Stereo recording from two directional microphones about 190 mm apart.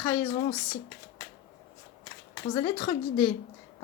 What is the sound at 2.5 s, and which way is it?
Speech, 20° left (ahead or behind).